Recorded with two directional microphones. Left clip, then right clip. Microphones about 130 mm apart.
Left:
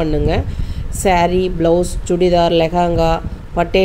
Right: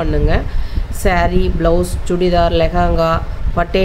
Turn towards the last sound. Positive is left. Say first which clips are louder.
# left 1 dB
turn(degrees=30)  # may be behind; listen again after turning